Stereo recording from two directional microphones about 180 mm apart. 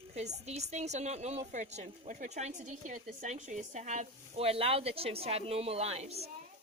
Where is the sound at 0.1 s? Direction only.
40° right (ahead or behind).